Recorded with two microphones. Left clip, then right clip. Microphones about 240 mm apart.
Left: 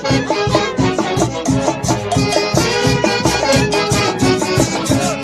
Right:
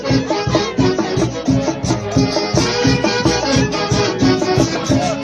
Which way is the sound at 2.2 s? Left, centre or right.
Left.